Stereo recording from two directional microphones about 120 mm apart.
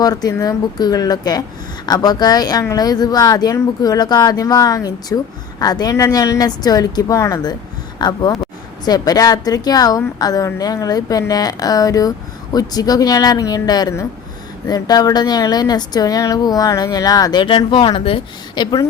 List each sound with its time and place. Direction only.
0.0 s speech: 30° left (ahead or behind)
17.4 s speech: 40° left (ahead or behind)
18.5 s speech: 35° left (ahead or behind)